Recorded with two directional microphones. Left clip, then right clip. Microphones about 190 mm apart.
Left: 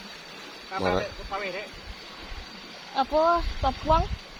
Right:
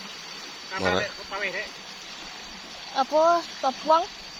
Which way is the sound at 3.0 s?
15° right (ahead or behind).